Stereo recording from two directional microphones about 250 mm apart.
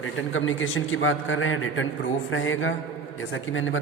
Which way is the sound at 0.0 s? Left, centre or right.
Left.